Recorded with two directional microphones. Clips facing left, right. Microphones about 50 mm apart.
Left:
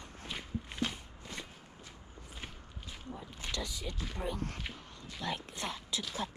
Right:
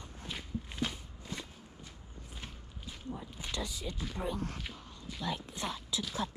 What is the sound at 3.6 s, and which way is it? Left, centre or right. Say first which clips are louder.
Speech: right 1 dB; left.